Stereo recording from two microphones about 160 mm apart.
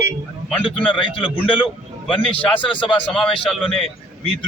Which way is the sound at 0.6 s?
30° left (ahead or behind).